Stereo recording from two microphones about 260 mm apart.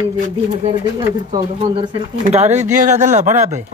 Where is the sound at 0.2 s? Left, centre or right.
Right.